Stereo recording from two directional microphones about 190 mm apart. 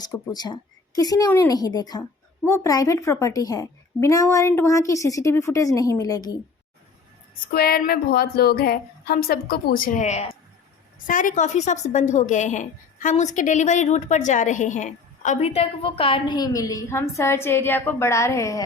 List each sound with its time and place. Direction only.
0.0 s a woman's voice: 20° left (ahead or behind)
7.5 s a woman's voice: 50° left (ahead or behind); by 18.6 s 15° left (ahead or behind)